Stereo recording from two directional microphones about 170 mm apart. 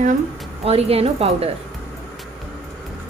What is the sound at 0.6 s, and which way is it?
Speech, 35° right (ahead or behind).